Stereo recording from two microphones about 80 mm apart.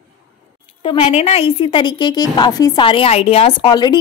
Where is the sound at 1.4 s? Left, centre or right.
Left.